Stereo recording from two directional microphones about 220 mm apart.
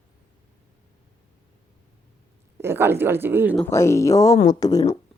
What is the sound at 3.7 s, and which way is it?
Speech, 15° left (ahead or behind).